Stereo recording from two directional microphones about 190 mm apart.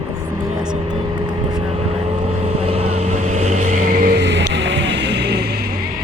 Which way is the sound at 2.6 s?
35° right (ahead or behind).